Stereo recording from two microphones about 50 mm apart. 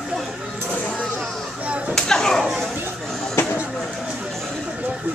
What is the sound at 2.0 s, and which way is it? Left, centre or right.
Chop, centre.